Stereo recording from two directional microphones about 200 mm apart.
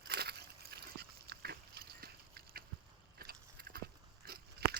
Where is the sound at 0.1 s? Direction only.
55° right (ahead or behind).